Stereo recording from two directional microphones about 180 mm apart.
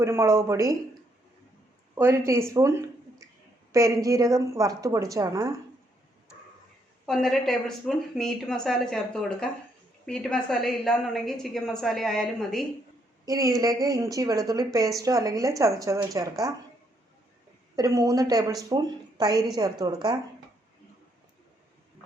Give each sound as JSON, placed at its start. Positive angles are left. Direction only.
{"t": 0.0, "sound": "a woman's voice", "side_deg": -15}
{"t": 2.0, "sound": "a woman's voice", "side_deg": -15}
{"t": 7.0, "sound": "a woman's voice", "side_deg": 5}
{"t": 13.2, "sound": "speech", "side_deg": -20}
{"t": 17.7, "sound": "speech", "side_deg": -20}